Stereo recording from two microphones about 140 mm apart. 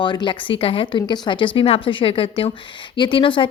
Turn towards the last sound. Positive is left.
turn(degrees=35)  # may be behind; listen again after turning